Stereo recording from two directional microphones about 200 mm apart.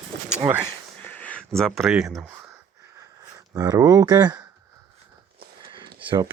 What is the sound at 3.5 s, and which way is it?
Speech, 20° right (ahead or behind).